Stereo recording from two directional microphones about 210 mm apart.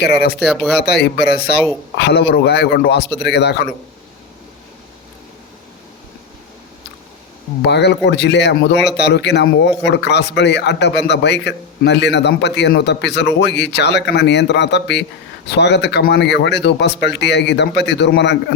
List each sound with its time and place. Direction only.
0.0 s speech: 50° left (ahead or behind)
0.3 s speech: centre (ahead or behind)
0.8 s speech: 50° left (ahead or behind)
7.7 s a man's voice: 55° left (ahead or behind)